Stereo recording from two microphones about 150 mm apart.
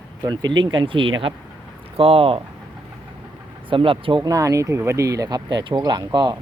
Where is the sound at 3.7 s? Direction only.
35° right (ahead or behind).